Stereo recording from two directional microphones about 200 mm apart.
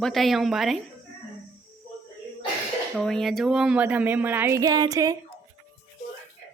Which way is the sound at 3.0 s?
5° left (ahead or behind).